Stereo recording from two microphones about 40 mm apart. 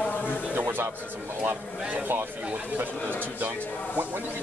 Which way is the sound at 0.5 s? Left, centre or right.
Right.